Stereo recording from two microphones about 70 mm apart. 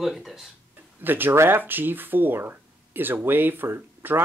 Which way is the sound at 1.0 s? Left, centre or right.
Right.